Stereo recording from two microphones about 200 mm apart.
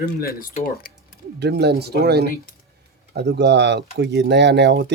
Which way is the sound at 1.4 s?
55° right (ahead or behind).